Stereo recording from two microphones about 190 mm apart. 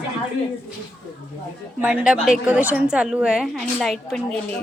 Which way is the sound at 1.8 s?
10° right (ahead or behind).